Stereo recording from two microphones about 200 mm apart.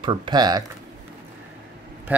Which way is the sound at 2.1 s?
10° right (ahead or behind).